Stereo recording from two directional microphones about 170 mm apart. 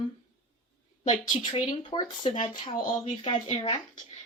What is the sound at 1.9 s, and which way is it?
Speech, 30° left (ahead or behind).